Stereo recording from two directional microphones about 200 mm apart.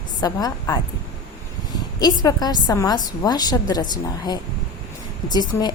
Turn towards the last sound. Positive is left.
turn(degrees=20)  # may be behind; listen again after turning